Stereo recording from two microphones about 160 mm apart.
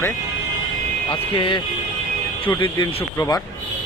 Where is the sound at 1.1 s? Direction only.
35° left (ahead or behind).